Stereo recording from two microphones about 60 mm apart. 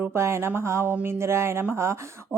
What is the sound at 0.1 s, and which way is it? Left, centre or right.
Speech, right.